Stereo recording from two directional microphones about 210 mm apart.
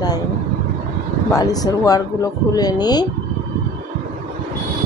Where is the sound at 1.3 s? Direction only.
15° left (ahead or behind).